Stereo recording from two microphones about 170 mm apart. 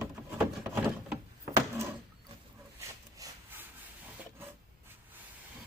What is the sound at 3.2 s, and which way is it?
Sawing, 10° right (ahead or behind).